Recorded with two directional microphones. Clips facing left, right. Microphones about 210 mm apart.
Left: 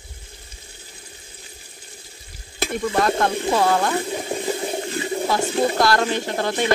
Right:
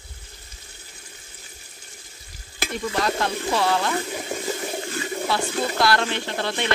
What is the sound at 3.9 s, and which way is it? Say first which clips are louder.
Water: left 3 dB; 30° left (ahead or behind).